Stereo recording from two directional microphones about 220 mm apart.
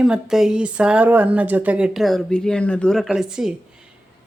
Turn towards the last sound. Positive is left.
turn(degrees=0)  # may be behind; listen again after turning